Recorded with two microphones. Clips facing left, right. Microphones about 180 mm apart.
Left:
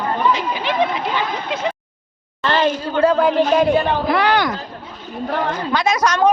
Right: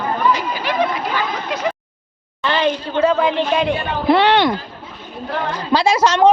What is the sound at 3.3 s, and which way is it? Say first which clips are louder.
Speech: left 4 dB; 40° left (ahead or behind).